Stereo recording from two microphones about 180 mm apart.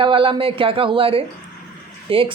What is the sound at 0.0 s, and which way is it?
Speech, 30° right (ahead or behind).